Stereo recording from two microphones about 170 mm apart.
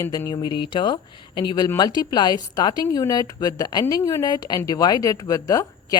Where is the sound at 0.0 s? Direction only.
20° left (ahead or behind).